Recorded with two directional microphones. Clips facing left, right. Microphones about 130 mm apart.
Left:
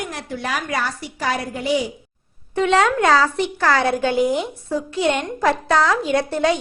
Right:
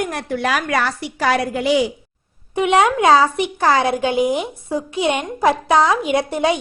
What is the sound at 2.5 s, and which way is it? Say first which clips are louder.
A woman's voice: right 2 dB; 15° right (ahead or behind).